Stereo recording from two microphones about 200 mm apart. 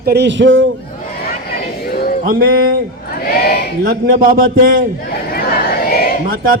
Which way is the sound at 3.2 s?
50° left (ahead or behind).